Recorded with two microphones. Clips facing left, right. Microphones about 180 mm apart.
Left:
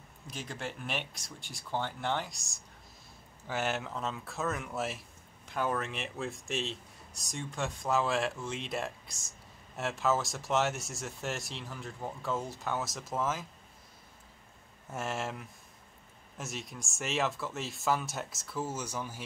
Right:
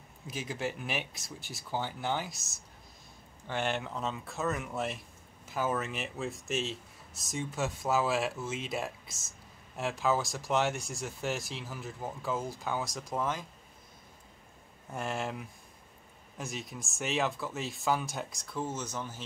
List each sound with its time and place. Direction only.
0.3 s speech: 5° right (ahead or behind)
14.9 s speech: centre (ahead or behind)